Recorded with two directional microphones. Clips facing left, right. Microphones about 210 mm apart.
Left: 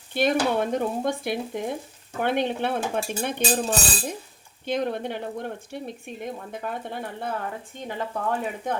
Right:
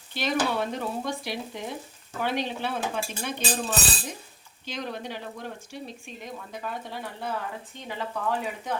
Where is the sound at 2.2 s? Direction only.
55° left (ahead or behind).